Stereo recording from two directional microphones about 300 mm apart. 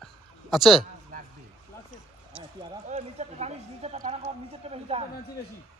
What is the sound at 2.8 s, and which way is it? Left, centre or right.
Speech, right.